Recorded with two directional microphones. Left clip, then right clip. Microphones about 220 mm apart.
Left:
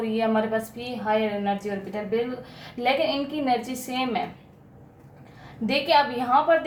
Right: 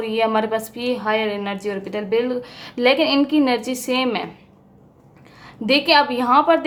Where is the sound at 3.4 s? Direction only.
40° right (ahead or behind).